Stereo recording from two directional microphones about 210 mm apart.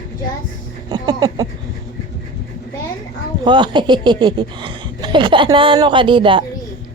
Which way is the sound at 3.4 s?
20° right (ahead or behind).